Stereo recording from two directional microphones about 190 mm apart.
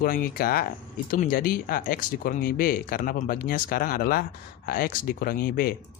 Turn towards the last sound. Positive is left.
turn(degrees=50)  # may be behind; listen again after turning